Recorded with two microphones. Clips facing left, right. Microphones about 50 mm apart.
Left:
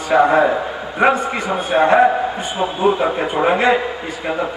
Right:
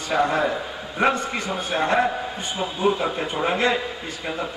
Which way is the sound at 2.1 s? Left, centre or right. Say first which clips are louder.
Left 9 dB; left.